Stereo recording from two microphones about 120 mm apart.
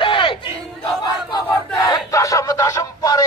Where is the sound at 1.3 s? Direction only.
35° left (ahead or behind).